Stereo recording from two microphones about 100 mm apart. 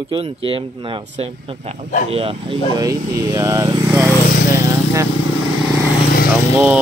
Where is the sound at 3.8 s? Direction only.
20° right (ahead or behind).